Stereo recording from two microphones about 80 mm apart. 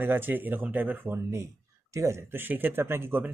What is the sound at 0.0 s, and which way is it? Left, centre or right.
Speech, right.